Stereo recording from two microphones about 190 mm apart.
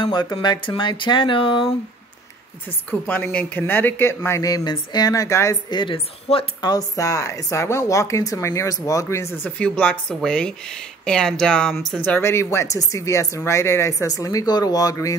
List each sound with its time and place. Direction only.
0.0 s speech: 25° left (ahead or behind)
2.9 s speech: 10° left (ahead or behind)